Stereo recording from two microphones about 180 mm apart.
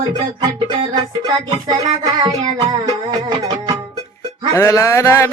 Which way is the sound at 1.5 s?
30° right (ahead or behind).